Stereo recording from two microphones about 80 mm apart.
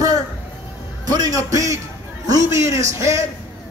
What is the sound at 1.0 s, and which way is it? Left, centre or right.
A man's voice, right.